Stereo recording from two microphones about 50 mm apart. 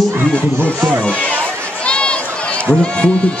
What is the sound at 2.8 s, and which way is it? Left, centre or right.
Speech, centre.